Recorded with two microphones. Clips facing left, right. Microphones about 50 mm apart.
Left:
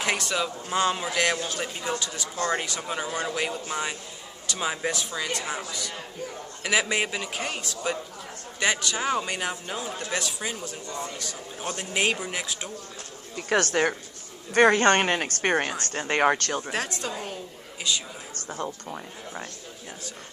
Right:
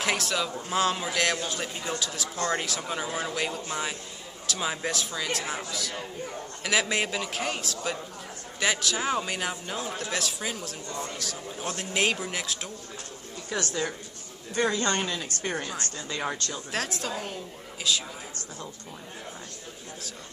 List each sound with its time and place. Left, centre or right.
0.0 s a man's voice: centre
13.4 s a woman's voice: left
16.7 s a man's voice: centre